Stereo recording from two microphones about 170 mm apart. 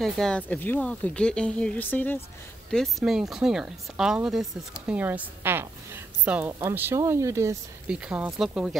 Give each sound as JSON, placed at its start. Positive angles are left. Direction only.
{"t": 0.0, "sound": "speech", "side_deg": 5}
{"t": 2.7, "sound": "speech", "side_deg": 0}
{"t": 7.9, "sound": "speech", "side_deg": -5}